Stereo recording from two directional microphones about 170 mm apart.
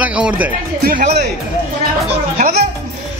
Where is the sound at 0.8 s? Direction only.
50° right (ahead or behind).